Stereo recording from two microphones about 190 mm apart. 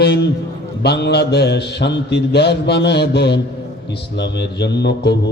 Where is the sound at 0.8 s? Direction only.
60° left (ahead or behind).